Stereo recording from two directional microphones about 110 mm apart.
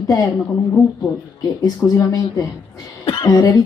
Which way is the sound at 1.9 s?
30° left (ahead or behind).